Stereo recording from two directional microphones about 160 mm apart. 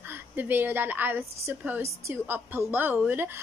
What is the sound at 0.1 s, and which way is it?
A woman's voice, 10° right (ahead or behind).